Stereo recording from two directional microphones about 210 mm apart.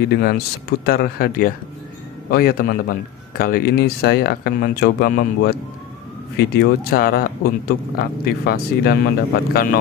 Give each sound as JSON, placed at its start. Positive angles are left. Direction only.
{"t": 0.1, "sound": "a man's voice", "side_deg": 50}